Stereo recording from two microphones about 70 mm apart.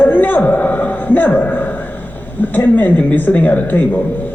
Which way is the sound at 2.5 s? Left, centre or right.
Left.